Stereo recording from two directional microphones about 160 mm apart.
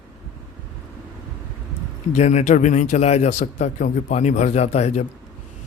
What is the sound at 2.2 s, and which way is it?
Speech, 45° left (ahead or behind).